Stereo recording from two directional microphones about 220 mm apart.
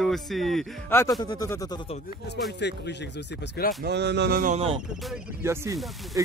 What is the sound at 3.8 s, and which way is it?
Speech, 50° right (ahead or behind).